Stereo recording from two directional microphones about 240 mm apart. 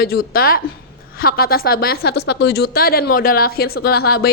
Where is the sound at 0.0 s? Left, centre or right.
Left.